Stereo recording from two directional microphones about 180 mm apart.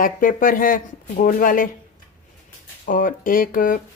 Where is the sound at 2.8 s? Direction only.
50° left (ahead or behind).